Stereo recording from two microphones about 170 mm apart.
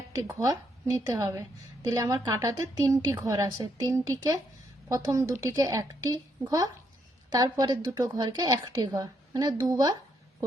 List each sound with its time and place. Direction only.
0.1 s a woman's voice: 20° right (ahead or behind)